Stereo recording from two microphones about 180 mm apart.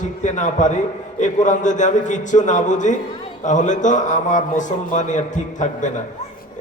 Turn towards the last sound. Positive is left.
turn(degrees=45)  # may be behind; listen again after turning